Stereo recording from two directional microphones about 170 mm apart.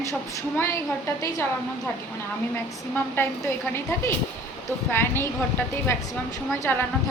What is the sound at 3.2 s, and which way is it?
Speech, 15° left (ahead or behind).